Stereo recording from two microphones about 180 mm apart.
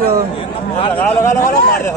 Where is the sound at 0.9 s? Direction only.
10° left (ahead or behind).